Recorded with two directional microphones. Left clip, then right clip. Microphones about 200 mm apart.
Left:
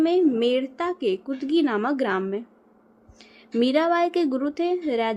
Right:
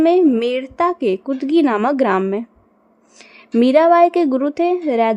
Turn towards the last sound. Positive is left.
turn(degrees=-35)  # may be behind; listen again after turning